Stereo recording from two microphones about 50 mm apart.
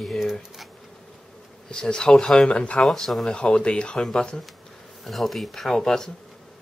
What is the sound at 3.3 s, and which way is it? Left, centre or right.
Speech, centre.